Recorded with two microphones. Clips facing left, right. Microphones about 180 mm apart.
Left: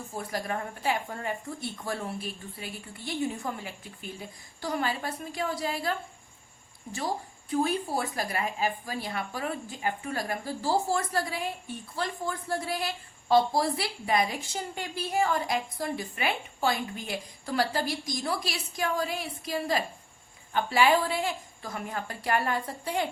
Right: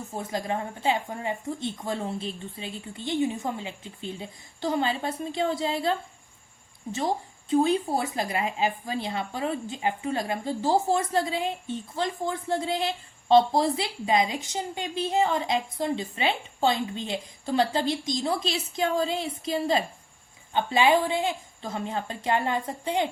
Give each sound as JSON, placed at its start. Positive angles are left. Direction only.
{"t": 0.1, "sound": "a woman's voice", "side_deg": -20}
{"t": 7.5, "sound": "a woman's voice", "side_deg": -20}